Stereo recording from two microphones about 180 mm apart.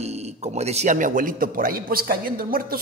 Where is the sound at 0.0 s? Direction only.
35° right (ahead or behind).